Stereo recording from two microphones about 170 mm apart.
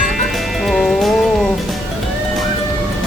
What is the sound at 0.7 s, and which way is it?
Music, centre (ahead or behind).